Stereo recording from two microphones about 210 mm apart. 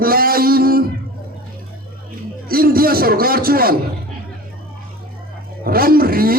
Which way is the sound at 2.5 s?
45° right (ahead or behind).